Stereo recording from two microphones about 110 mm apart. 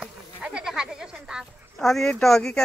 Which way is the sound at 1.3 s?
5° left (ahead or behind).